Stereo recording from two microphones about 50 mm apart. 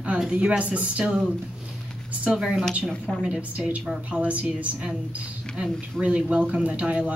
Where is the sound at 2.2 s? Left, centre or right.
Right.